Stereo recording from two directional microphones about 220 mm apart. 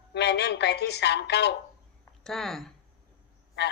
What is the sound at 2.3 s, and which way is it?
Speech, centre (ahead or behind).